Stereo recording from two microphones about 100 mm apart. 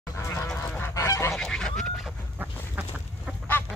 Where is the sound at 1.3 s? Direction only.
5° left (ahead or behind).